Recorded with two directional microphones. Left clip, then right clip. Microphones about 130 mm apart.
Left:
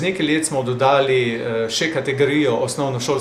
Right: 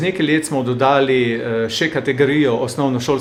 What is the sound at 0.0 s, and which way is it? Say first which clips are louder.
Speech: right 2 dB; 25° left (ahead or behind).